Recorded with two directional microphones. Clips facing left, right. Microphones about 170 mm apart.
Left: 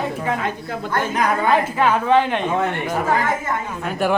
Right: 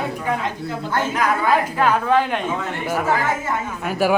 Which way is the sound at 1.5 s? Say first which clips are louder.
Even; centre (ahead or behind).